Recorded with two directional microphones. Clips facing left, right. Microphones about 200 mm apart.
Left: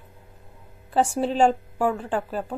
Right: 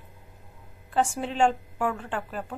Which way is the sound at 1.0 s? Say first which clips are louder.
Left 4 dB; 35° left (ahead or behind).